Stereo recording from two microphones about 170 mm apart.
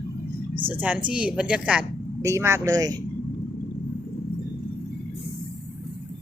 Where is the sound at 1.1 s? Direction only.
5° right (ahead or behind).